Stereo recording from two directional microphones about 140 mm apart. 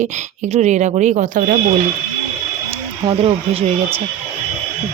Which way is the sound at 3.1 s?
45° right (ahead or behind).